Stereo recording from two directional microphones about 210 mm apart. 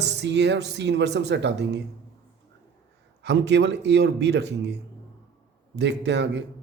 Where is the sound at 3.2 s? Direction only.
55° right (ahead or behind).